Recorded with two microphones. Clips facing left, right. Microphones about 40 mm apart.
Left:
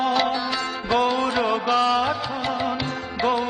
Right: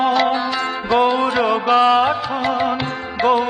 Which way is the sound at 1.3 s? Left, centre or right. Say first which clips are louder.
Right 5 dB; centre.